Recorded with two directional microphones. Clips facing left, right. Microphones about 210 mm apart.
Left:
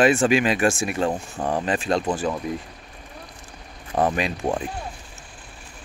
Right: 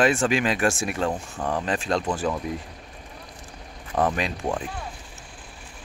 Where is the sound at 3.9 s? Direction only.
25° left (ahead or behind).